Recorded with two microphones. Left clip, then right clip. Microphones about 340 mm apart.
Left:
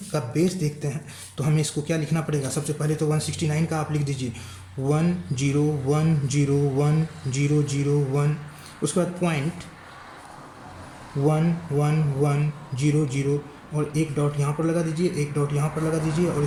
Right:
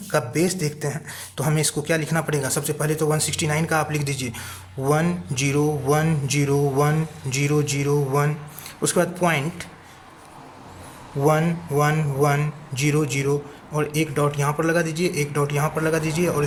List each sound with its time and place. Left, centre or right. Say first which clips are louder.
0.1 s speech: right 3 dB; right
11.3 s speech: right 5 dB; right